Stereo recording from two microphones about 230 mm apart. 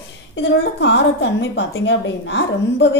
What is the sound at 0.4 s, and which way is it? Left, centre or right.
A woman's voice, left.